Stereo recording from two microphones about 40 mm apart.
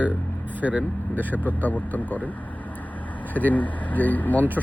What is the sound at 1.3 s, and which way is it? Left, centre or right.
Speech, left.